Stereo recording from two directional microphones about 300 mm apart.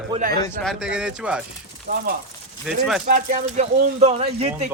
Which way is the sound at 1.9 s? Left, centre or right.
Right.